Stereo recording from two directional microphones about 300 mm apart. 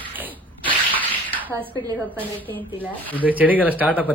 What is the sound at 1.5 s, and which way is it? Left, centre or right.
A woman's voice, centre.